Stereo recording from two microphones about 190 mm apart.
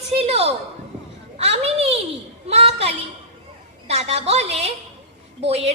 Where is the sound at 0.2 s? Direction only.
35° right (ahead or behind).